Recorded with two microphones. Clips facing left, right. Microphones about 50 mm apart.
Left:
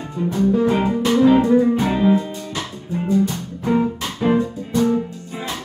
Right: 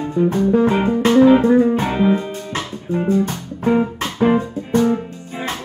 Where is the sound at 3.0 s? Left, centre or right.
Right.